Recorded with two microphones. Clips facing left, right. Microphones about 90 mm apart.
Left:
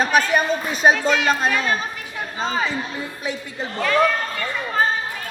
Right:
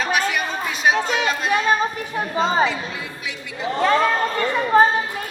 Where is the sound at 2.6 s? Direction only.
40° left (ahead or behind).